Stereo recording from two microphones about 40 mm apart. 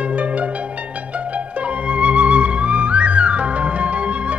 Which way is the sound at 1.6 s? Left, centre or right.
Right.